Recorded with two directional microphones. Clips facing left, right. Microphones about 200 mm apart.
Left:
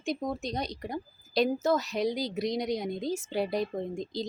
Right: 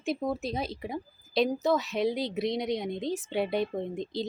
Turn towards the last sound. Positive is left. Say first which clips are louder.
# right 1 dB
turn(degrees=0)  # may be behind; listen again after turning